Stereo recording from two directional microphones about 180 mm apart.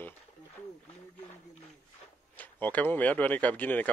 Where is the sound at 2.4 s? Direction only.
10° left (ahead or behind).